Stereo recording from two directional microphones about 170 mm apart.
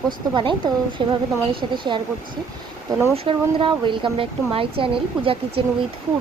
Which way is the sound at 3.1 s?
35° right (ahead or behind).